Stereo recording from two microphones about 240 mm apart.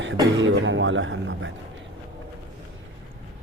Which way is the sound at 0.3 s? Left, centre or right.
Right.